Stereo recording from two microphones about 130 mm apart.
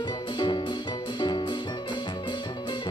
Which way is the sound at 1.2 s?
35° left (ahead or behind).